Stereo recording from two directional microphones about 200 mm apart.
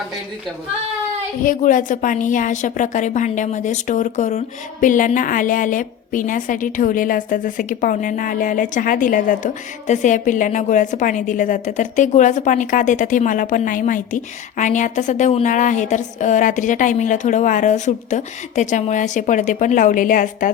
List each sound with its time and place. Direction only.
1.5 s a woman's voice: 40° left (ahead or behind)